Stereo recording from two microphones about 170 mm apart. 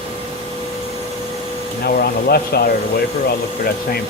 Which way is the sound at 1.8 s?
65° left (ahead or behind).